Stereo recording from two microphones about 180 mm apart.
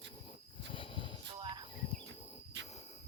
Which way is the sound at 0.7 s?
25° left (ahead or behind).